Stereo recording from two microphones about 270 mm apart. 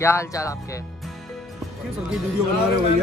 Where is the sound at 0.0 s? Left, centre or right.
Centre.